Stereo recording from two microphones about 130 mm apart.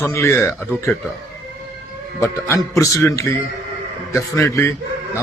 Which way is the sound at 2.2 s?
20° left (ahead or behind).